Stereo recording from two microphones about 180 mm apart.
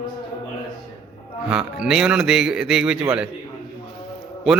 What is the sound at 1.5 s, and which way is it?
Speech, 5° right (ahead or behind).